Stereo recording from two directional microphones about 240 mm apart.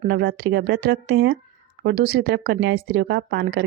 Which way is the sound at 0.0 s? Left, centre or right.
Right.